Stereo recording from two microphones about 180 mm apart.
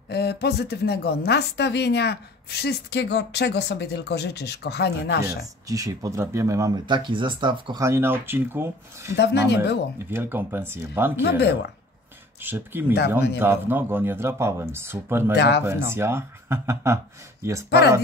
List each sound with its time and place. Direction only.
0.1 s speech: 65° left (ahead or behind)
5.2 s speech: 20° right (ahead or behind)
9.1 s speech: 70° left (ahead or behind)
10.0 s speech: 10° right (ahead or behind)
11.2 s speech: 70° left (ahead or behind)
12.4 s speech: 10° right (ahead or behind)
15.3 s speech: 70° left (ahead or behind)
15.6 s speech: 15° right (ahead or behind)
17.6 s speech: 65° left (ahead or behind)